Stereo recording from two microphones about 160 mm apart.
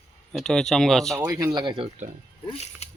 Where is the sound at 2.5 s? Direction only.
40° left (ahead or behind).